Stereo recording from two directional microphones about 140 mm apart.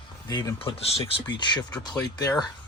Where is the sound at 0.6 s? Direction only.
40° left (ahead or behind).